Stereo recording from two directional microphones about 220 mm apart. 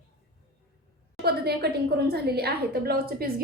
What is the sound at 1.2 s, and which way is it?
A woman's voice, 45° right (ahead or behind).